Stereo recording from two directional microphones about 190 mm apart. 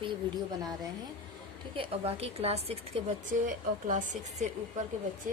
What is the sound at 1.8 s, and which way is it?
A woman's voice, 30° right (ahead or behind).